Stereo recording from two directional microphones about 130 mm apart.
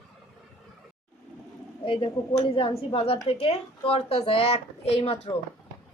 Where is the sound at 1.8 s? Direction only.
45° left (ahead or behind).